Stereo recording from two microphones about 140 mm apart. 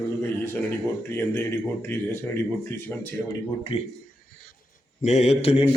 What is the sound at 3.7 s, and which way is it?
Speech, 40° left (ahead or behind).